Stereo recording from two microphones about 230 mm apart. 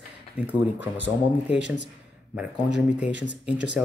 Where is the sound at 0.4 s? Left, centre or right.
Centre.